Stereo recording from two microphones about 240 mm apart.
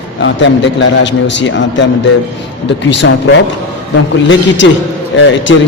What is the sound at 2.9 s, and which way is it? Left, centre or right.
A woman's voice, left.